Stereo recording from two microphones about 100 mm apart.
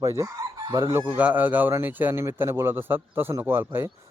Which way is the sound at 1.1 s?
15° right (ahead or behind).